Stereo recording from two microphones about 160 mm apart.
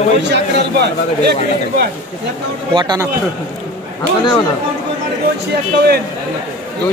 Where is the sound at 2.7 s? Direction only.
25° right (ahead or behind).